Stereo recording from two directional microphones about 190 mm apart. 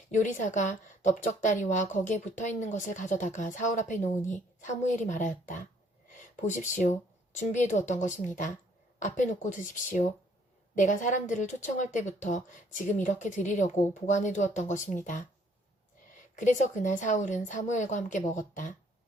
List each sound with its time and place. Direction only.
0.1 s a woman's voice: 40° left (ahead or behind)
16.3 s a woman's voice: 40° left (ahead or behind)